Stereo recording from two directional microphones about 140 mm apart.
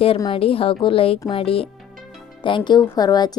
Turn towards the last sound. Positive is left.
turn(degrees=30)  # may be behind; listen again after turning